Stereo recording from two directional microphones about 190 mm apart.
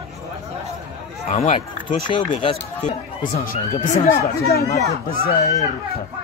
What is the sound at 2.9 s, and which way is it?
Speech, 40° left (ahead or behind).